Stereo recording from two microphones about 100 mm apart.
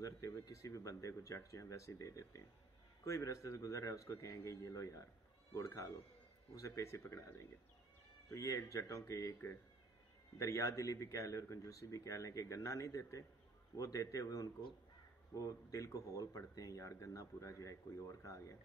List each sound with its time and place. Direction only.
0.5 s speech: 35° left (ahead or behind)
8.3 s speech: 30° left (ahead or behind)